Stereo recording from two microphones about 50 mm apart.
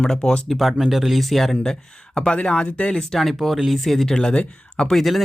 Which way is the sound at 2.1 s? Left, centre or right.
Left.